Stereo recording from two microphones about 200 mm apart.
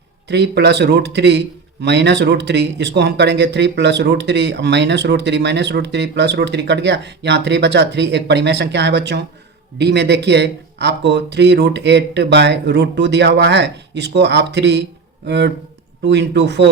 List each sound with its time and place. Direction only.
0.3 s speech: 55° right (ahead or behind)